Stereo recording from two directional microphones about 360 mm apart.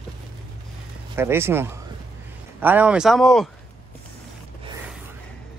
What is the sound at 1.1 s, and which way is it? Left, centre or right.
Speech, centre.